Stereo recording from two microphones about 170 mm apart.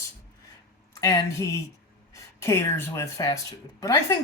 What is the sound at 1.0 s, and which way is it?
Speech, 20° left (ahead or behind).